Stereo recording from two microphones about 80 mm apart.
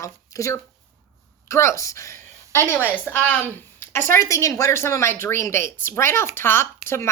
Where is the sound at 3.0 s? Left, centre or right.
Left.